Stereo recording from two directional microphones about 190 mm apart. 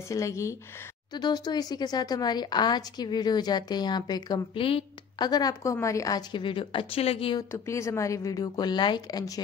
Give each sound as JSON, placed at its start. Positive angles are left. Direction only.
{"t": 0.1, "sound": "a woman's voice", "side_deg": 15}
{"t": 7.5, "sound": "a woman's voice", "side_deg": 15}